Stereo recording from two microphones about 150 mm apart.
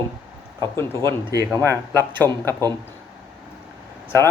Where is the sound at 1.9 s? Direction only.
15° left (ahead or behind).